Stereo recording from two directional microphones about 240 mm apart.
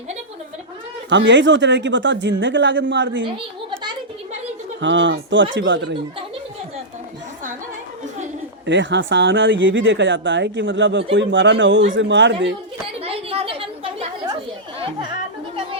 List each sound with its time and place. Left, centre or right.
1.1 s speech: right
4.8 s speech: right
8.6 s speech: right
13.0 s chatter: right